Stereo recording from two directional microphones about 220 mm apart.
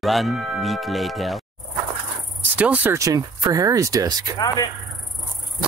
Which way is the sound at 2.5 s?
5° right (ahead or behind).